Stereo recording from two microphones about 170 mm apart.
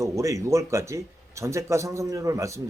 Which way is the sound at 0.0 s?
20° right (ahead or behind).